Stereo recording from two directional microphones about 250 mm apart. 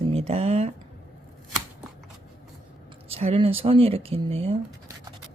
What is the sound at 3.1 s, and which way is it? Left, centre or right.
Speech, right.